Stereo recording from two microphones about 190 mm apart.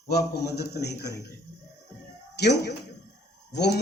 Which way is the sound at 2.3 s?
60° left (ahead or behind).